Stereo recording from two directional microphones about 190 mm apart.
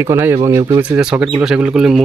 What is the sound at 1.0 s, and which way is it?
Speech, 5° right (ahead or behind).